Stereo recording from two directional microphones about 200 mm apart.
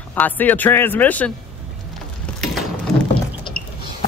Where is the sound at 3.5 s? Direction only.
45° left (ahead or behind).